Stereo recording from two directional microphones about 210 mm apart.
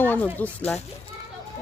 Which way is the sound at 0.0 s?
10° left (ahead or behind).